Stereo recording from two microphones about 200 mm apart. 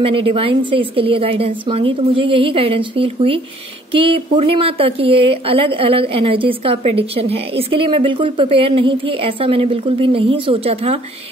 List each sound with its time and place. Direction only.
0.0 s a woman's voice: 30° right (ahead or behind)